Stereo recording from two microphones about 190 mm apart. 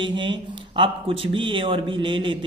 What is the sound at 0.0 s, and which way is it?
Speech, 25° right (ahead or behind).